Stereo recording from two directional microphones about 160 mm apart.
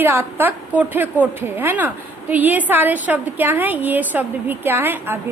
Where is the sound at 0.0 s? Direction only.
15° right (ahead or behind).